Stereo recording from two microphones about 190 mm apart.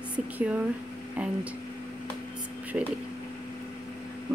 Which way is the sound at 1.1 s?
5° right (ahead or behind).